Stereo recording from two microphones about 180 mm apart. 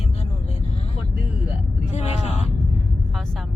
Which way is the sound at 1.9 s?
40° left (ahead or behind).